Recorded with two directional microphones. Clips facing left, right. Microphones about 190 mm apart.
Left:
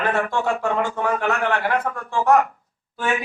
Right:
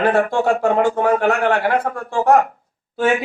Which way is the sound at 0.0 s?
35° right (ahead or behind).